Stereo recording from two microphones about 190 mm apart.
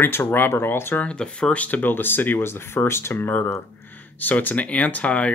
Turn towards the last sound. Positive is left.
turn(degrees=5)  # may be behind; listen again after turning